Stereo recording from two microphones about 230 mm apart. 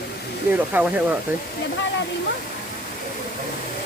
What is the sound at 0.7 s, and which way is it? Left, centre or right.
Speech, centre.